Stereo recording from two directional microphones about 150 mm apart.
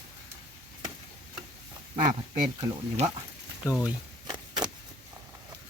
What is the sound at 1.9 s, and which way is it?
Speech, 25° right (ahead or behind).